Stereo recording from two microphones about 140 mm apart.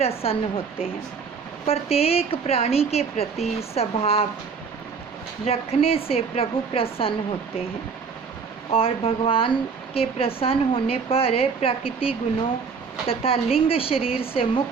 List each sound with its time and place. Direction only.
0.0 s a woman's voice: 45° left (ahead or behind)
5.5 s a woman's voice: 45° left (ahead or behind)
8.7 s a woman's voice: 40° left (ahead or behind)